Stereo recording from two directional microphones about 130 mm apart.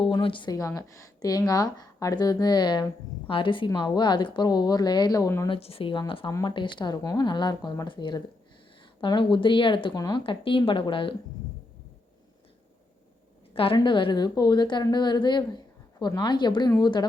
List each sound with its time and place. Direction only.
0.0 s a sound: 40° left (ahead or behind)
0.5 s a woman's voice: 25° left (ahead or behind)
5.5 s a woman's voice: 50° left (ahead or behind)
13.5 s a woman's voice: 45° left (ahead or behind)